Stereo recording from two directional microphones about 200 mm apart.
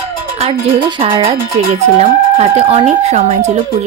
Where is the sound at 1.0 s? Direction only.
30° right (ahead or behind).